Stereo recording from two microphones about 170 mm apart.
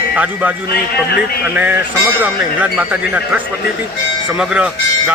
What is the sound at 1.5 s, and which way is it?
Speech, 10° right (ahead or behind).